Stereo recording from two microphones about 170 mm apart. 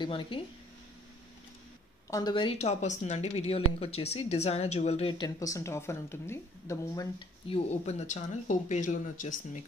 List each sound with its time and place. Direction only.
0.0 s speech: 30° left (ahead or behind)
2.0 s speech: 20° left (ahead or behind)
7.4 s speech: 35° left (ahead or behind)